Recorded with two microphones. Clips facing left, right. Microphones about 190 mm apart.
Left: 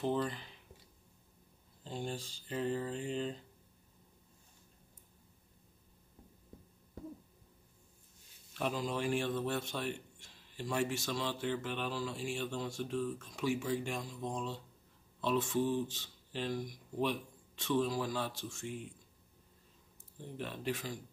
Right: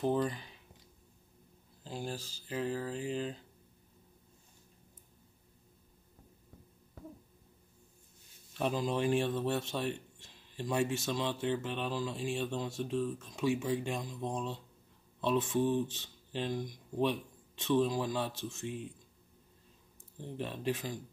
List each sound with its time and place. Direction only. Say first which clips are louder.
0.0 s speech: right 3 dB; 10° right (ahead or behind)
1.8 s speech: even; 5° right (ahead or behind)
8.5 s a man's voice: right 4 dB; 20° right (ahead or behind)
20.3 s a man's voice: right 3 dB; 20° right (ahead or behind)